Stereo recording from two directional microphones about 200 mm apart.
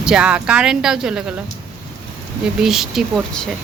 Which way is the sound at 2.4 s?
Centre (ahead or behind).